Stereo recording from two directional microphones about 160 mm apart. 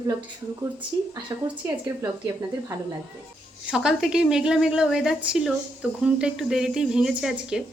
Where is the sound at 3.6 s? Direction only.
5° right (ahead or behind).